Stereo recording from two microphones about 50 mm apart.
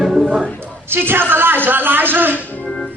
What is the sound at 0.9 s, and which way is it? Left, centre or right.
A woman's voice, right.